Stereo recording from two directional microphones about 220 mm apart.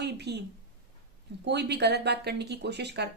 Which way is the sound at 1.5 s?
50° right (ahead or behind).